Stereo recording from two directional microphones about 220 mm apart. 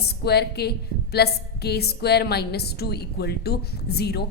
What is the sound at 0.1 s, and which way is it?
A woman's voice, 45° left (ahead or behind).